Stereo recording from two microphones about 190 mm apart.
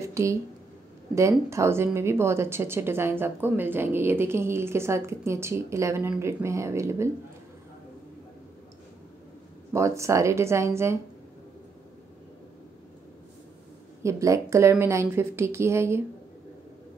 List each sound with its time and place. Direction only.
0.0 s a sound: 15° right (ahead or behind)
1.1 s speech: 15° right (ahead or behind)
9.7 s speech: 15° right (ahead or behind)
14.0 s speech: 15° right (ahead or behind)